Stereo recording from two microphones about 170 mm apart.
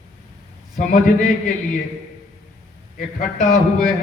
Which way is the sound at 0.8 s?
45° left (ahead or behind).